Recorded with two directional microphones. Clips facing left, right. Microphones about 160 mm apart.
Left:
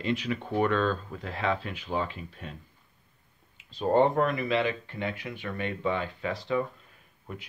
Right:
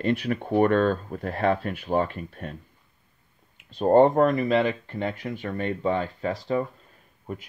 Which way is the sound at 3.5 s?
55° right (ahead or behind).